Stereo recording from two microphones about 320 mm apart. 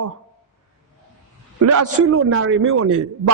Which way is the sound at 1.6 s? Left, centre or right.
Right.